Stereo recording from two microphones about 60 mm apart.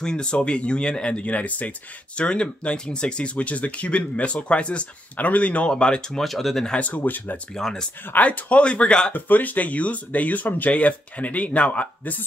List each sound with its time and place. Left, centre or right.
0.0 s speech: centre
6.9 s speech: left
7.5 s speech: centre
8.1 s speech: left
9.1 s speech: left